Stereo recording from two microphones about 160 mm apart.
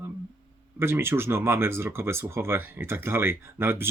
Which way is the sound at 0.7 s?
15° right (ahead or behind).